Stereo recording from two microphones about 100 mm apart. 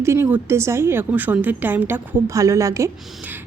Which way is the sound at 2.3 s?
30° right (ahead or behind).